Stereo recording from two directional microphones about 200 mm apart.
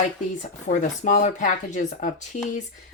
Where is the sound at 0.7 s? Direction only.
35° left (ahead or behind).